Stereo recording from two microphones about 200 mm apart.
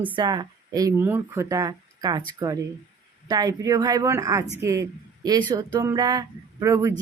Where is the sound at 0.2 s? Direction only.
20° right (ahead or behind).